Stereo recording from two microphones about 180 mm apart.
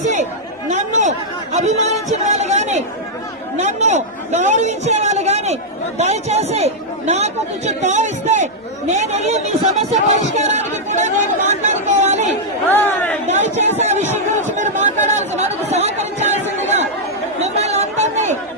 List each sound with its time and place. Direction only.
0.0 s chatter: 40° right (ahead or behind)
1.5 s a man's voice: 40° right (ahead or behind)
12.7 s speech: 10° left (ahead or behind)
13.2 s speech: 40° right (ahead or behind)
17.4 s chatter: 40° right (ahead or behind)